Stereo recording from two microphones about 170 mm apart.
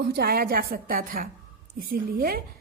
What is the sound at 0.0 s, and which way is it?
A woman's voice, 65° right (ahead or behind).